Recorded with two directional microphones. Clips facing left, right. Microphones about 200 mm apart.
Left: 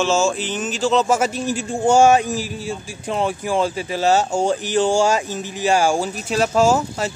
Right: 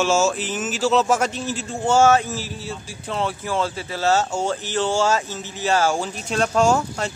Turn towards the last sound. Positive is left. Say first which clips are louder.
# left 2 dB
turn(degrees=5)  # may be behind; listen again after turning